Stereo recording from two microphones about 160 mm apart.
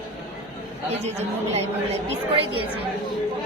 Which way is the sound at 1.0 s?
40° right (ahead or behind).